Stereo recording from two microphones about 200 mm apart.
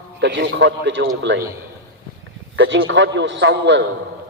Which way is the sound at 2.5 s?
60° right (ahead or behind).